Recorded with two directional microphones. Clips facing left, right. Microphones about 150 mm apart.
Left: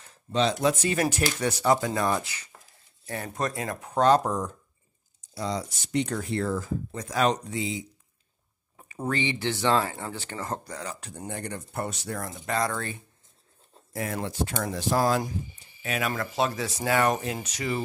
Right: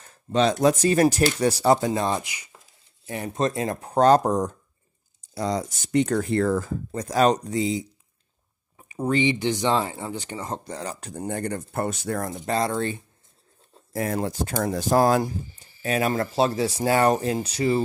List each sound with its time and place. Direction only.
0.0 s speech: 50° right (ahead or behind)
8.8 s speech: 15° right (ahead or behind)
10.8 s speech: 40° right (ahead or behind)
12.5 s speech: 25° right (ahead or behind)
13.9 s speech: 40° right (ahead or behind)
15.8 s speech: 35° right (ahead or behind)